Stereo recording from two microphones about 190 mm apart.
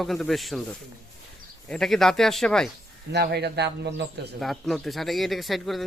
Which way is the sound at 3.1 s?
60° right (ahead or behind).